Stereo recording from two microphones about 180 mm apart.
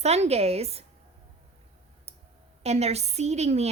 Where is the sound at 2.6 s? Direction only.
35° right (ahead or behind).